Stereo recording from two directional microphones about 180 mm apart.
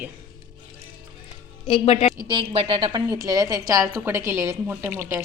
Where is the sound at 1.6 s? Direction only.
30° left (ahead or behind).